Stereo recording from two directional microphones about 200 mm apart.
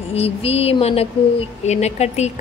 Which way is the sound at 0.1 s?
30° left (ahead or behind).